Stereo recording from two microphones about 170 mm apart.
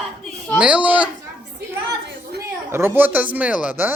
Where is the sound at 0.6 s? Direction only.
5° right (ahead or behind).